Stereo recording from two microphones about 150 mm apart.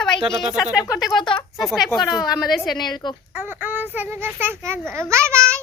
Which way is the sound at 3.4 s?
15° right (ahead or behind).